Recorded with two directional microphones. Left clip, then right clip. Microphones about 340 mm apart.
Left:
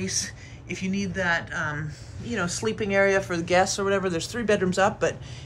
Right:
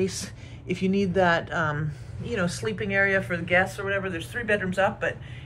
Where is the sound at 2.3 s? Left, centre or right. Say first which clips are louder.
Left 1 dB; centre.